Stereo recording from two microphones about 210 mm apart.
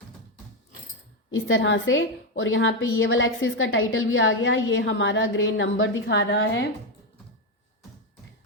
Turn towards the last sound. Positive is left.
turn(degrees=55)  # may be behind; listen again after turning